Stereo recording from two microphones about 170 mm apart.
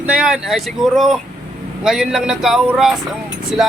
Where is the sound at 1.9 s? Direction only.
5° right (ahead or behind).